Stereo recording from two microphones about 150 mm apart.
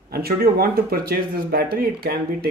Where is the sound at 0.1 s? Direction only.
90° right.